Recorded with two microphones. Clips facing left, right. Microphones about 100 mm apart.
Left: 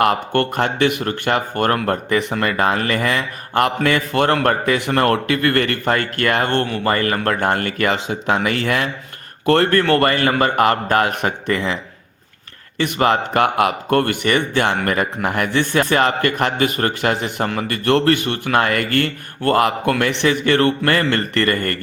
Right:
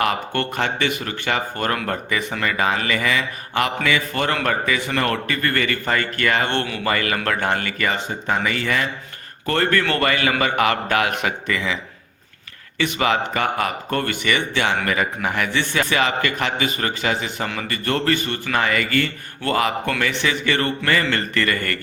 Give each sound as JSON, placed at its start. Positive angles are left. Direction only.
{"t": 0.0, "sound": "speech", "side_deg": 55}
{"t": 7.9, "sound": "speech", "side_deg": 90}
{"t": 8.4, "sound": "speech", "side_deg": 60}
{"t": 12.8, "sound": "speech", "side_deg": 50}
{"t": 17.8, "sound": "speech", "side_deg": 60}